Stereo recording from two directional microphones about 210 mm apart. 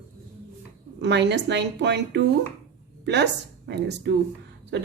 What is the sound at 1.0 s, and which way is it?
A woman's voice, 55° right (ahead or behind).